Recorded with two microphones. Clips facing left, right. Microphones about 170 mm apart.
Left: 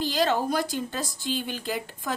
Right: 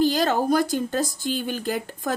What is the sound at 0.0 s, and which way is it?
A woman's voice, 45° right (ahead or behind).